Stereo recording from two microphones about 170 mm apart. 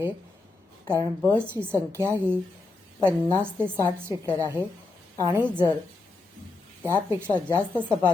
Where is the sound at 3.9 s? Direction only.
15° right (ahead or behind).